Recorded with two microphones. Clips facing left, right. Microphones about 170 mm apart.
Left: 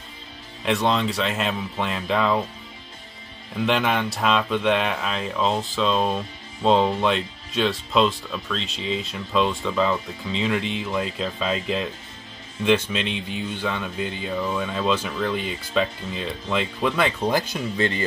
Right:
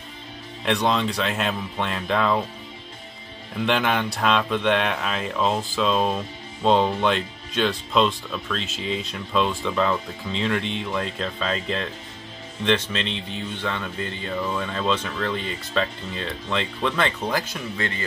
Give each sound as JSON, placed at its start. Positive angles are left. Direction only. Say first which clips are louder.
{"t": 0.7, "sound": "speech", "louder": "even", "side_deg": 0}
{"t": 3.5, "sound": "speech", "louder": "even", "side_deg": 0}
{"t": 17.3, "sound": "speech", "louder": "left 3 dB", "side_deg": 25}